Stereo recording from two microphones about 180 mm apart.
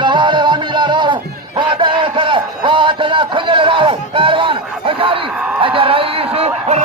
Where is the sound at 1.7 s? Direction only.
30° right (ahead or behind).